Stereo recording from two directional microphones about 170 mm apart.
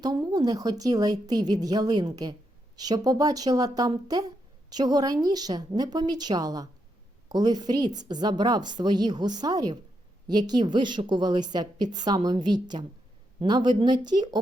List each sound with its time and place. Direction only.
0.3 s a woman's voice: 25° right (ahead or behind)